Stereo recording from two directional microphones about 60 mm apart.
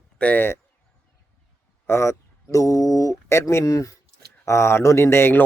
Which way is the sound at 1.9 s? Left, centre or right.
Left.